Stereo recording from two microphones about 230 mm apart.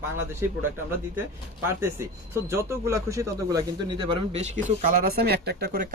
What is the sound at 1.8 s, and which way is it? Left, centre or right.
Speech, centre.